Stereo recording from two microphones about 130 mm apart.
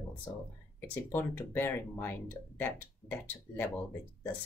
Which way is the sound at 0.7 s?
15° left (ahead or behind).